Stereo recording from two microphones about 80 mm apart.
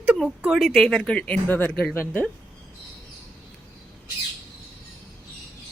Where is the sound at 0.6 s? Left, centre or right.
Centre; by 2.2 s left.